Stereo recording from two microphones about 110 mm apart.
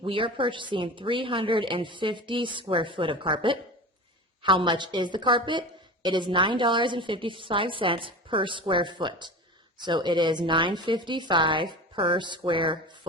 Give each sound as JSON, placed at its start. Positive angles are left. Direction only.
{"t": 0.0, "sound": "a woman's voice", "side_deg": -50}